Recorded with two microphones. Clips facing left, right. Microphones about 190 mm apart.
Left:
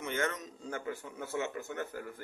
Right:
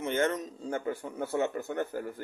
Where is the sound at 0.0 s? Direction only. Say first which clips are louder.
Right 6 dB; 30° right (ahead or behind).